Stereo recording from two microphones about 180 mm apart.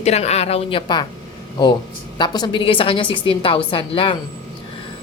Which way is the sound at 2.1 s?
25° left (ahead or behind).